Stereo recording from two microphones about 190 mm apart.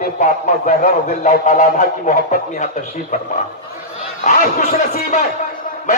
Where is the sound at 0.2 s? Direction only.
40° left (ahead or behind).